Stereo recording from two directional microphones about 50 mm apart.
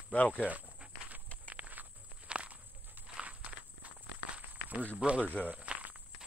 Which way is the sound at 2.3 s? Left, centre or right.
Right.